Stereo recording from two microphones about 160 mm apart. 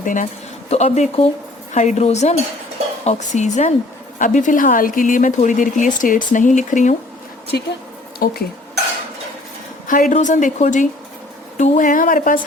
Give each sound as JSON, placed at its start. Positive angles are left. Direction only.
{"t": 0.0, "sound": "speech", "side_deg": 55}
{"t": 0.7, "sound": "speech", "side_deg": 45}
{"t": 7.5, "sound": "speech", "side_deg": 85}
{"t": 9.8, "sound": "speech", "side_deg": 55}